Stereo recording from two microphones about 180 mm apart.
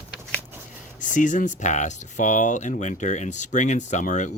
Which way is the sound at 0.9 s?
45° left (ahead or behind).